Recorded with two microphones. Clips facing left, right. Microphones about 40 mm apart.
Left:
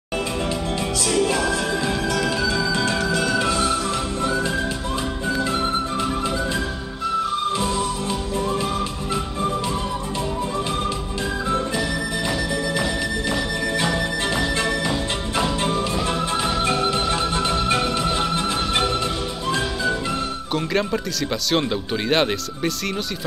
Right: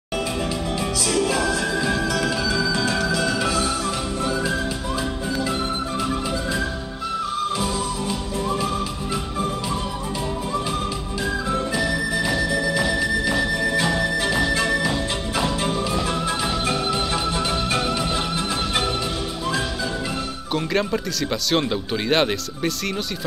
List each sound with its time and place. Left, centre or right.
1.0 s music: centre
4.2 s music: centre
11.5 s music: centre
20.5 s speech: centre